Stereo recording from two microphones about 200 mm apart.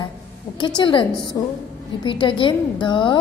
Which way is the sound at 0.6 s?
20° left (ahead or behind).